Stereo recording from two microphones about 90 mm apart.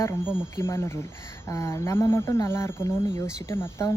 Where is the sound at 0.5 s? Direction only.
30° left (ahead or behind).